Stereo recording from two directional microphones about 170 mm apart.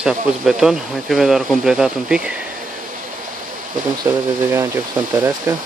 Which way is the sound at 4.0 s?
15° right (ahead or behind).